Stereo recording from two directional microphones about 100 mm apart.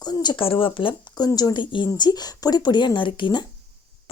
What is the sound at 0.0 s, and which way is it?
Speech, 45° left (ahead or behind).